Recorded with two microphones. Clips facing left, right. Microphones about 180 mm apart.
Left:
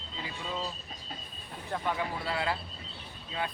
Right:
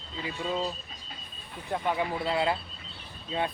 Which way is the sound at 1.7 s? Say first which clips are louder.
Right 4 dB; 20° right (ahead or behind).